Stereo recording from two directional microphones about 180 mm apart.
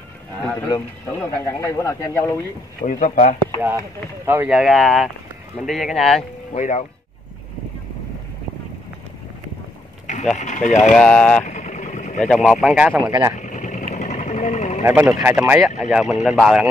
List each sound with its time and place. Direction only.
0.7 s speech: 15° left (ahead or behind)
2.8 s speech: 45° left (ahead or behind)
4.3 s speech: 10° right (ahead or behind)
6.5 s speech: 45° left (ahead or behind)
10.3 s speech: 40° left (ahead or behind)
11.0 s speech: 5° left (ahead or behind)
11.4 s vehicle: 40° left (ahead or behind)
12.3 s speech: centre (ahead or behind)
13.4 s vehicle: 45° left (ahead or behind)
14.9 s speech: 5° right (ahead or behind)